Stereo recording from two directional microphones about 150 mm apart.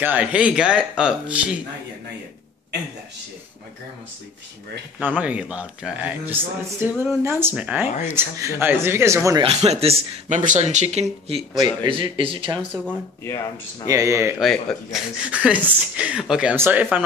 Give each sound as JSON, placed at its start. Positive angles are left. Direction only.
{"t": 0.0, "sound": "speech", "side_deg": -10}
{"t": 5.0, "sound": "speech", "side_deg": -10}
{"t": 9.4, "sound": "speech", "side_deg": -45}
{"t": 11.5, "sound": "a man's voice", "side_deg": -30}
{"t": 13.8, "sound": "speech", "side_deg": -20}
{"t": 14.4, "sound": "speech", "side_deg": 0}